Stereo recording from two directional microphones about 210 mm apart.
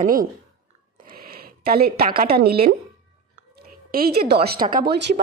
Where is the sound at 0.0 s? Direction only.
40° right (ahead or behind).